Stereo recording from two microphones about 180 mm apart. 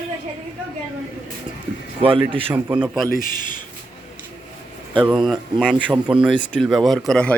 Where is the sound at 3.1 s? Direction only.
50° left (ahead or behind).